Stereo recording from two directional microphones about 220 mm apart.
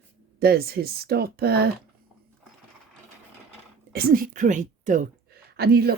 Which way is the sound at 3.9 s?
40° right (ahead or behind).